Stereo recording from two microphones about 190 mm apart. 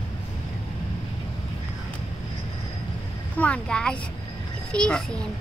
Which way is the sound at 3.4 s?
5° left (ahead or behind).